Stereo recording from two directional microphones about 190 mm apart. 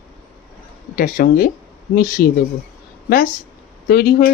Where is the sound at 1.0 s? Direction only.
50° left (ahead or behind).